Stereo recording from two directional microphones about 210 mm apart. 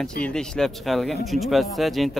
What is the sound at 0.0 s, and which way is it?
Speech, 5° left (ahead or behind).